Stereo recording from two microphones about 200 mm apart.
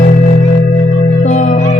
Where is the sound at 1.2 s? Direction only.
35° left (ahead or behind).